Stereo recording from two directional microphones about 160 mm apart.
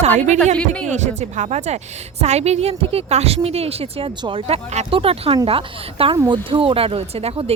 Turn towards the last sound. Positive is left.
turn(degrees=-35)  # may be behind; listen again after turning